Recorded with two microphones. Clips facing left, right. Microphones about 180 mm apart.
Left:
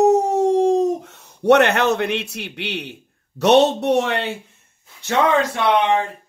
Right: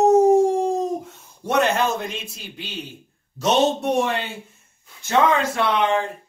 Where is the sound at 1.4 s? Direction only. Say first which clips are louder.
Left 6 dB; 70° left (ahead or behind).